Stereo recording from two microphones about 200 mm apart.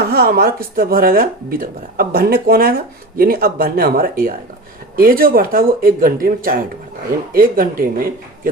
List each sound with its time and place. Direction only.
0.0 s speech: 50° right (ahead or behind)